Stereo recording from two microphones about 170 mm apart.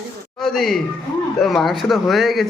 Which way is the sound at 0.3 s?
Centre (ahead or behind).